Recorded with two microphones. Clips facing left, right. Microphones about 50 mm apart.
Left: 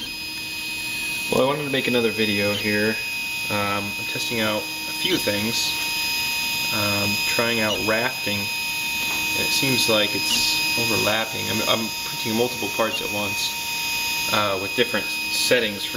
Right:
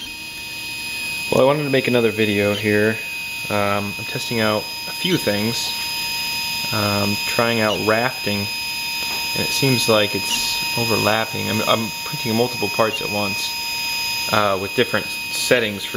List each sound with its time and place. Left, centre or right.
1.5 s speech: centre
6.7 s speech: centre
14.3 s speech: centre